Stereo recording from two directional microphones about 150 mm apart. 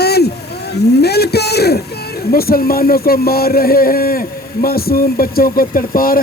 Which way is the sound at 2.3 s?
85° left.